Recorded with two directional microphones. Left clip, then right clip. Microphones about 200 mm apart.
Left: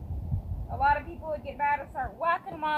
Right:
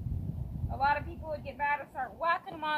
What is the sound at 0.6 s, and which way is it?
Speech, 15° right (ahead or behind).